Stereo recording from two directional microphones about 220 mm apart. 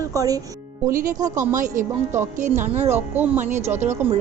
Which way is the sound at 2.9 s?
10° right (ahead or behind).